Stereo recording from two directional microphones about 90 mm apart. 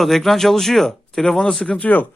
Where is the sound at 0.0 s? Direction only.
Centre (ahead or behind).